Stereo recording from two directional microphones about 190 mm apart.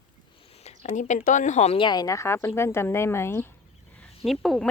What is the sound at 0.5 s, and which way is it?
A woman's voice, 35° left (ahead or behind).